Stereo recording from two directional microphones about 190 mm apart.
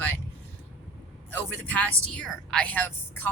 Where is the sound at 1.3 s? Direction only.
10° left (ahead or behind).